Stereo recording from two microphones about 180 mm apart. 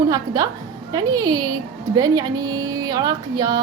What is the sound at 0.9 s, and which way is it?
A woman's voice, 20° right (ahead or behind).